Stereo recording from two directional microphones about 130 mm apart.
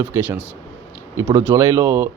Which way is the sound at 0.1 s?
15° right (ahead or behind).